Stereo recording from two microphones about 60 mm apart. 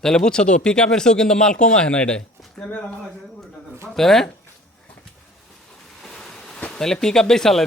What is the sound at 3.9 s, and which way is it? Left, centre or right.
Speech, centre.